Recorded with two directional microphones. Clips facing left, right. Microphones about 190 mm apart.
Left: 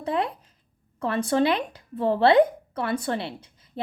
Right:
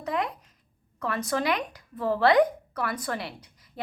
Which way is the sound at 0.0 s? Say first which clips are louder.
Left 3 dB; 30° left (ahead or behind).